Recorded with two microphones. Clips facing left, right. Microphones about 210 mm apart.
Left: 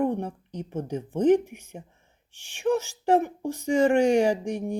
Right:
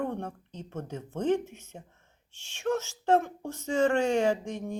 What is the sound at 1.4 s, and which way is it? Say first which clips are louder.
Speech: left 4 dB; 10° left (ahead or behind).